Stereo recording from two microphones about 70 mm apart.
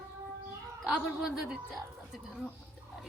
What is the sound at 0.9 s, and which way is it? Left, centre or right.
Speech, centre.